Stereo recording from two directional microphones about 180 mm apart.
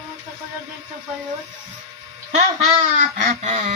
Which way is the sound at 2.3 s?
40° right (ahead or behind).